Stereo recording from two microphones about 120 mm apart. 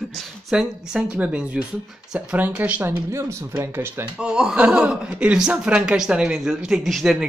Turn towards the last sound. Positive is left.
turn(degrees=0)  # may be behind; listen again after turning